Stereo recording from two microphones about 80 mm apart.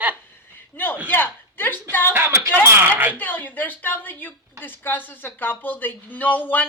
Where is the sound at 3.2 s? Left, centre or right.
Left.